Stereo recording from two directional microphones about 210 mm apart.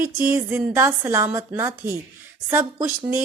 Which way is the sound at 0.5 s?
10° right (ahead or behind).